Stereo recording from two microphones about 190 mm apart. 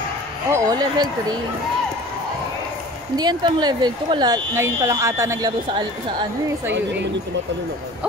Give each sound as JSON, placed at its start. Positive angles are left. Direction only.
{"t": 0.5, "sound": "speech", "side_deg": -20}
{"t": 3.2, "sound": "speech", "side_deg": -25}
{"t": 6.7, "sound": "speech", "side_deg": -65}